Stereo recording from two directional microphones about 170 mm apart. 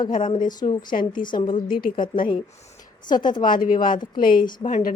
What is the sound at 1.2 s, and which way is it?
Speech, 30° left (ahead or behind).